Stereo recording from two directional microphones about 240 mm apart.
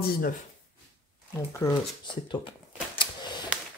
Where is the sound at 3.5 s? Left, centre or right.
Centre.